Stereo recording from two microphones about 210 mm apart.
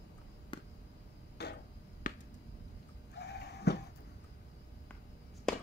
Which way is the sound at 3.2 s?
50° left (ahead or behind).